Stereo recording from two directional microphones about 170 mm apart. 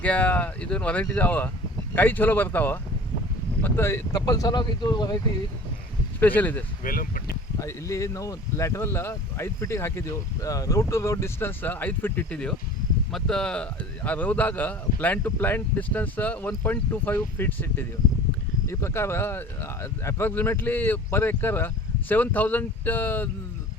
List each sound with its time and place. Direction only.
0.0 s speech: 10° left (ahead or behind); by 5.1 s 25° left (ahead or behind)
6.1 s speech: 10° left (ahead or behind)
6.8 s speech: 55° left (ahead or behind)
7.6 s speech: 15° left (ahead or behind)